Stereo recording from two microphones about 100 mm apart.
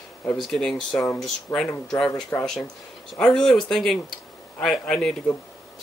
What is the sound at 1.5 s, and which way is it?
Speech, 35° left (ahead or behind).